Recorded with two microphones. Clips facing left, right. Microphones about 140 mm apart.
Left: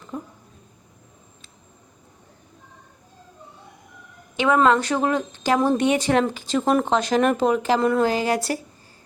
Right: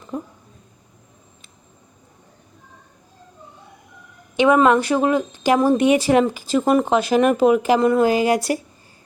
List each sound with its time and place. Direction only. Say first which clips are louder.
0.1 s speech: right 4 dB; 15° right (ahead or behind)
4.4 s speech: right 3 dB; 15° right (ahead or behind)